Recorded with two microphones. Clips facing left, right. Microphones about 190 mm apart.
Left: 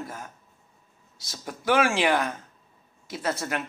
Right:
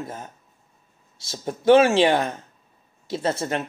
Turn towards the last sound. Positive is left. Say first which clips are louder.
# right 5 dB
turn(degrees=-25)  # may be behind; listen again after turning